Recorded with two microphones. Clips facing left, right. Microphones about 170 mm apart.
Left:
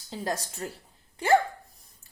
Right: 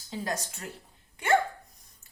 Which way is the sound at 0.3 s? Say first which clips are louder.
Left 3 dB; 35° left (ahead or behind).